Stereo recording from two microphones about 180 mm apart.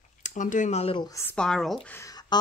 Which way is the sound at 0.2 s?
45° left (ahead or behind).